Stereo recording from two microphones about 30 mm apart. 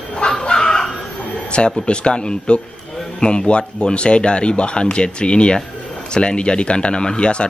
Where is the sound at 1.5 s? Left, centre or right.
Left.